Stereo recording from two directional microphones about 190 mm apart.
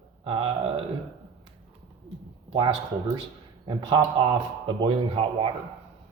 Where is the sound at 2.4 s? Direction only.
30° right (ahead or behind).